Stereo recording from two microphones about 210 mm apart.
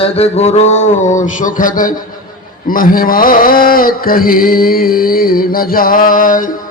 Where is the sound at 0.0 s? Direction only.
30° left (ahead or behind).